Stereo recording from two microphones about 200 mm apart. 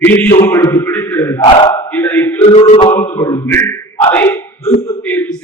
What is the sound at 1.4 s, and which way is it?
Speech, 25° left (ahead or behind).